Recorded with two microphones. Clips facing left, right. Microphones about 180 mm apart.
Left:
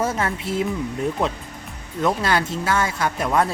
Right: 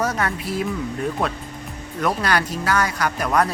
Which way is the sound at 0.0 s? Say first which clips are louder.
Even; 25° left (ahead or behind).